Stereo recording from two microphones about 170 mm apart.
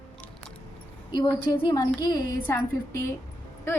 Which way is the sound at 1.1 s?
25° left (ahead or behind).